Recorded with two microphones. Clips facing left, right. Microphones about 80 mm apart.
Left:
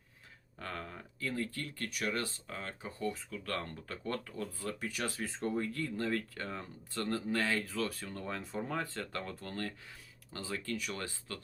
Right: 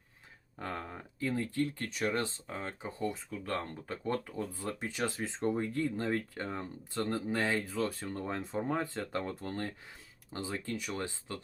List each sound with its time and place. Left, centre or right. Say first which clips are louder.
0.6 s speech: right 3 dB; right